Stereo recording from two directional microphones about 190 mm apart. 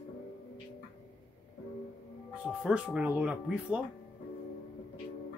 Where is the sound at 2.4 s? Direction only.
5° right (ahead or behind).